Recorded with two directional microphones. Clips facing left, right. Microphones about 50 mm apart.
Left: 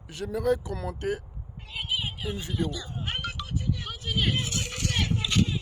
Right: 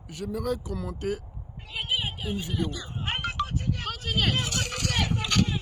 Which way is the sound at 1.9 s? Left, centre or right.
Right.